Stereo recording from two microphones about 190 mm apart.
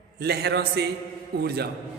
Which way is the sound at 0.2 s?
60° right (ahead or behind).